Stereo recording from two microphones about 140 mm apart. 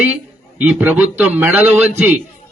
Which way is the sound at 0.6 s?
15° right (ahead or behind).